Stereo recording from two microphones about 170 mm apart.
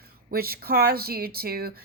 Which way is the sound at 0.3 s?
65° right (ahead or behind).